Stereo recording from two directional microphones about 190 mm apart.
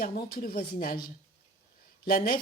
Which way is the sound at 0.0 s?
50° left (ahead or behind).